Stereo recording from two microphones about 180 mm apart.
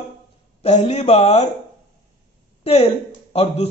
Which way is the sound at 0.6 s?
35° left (ahead or behind).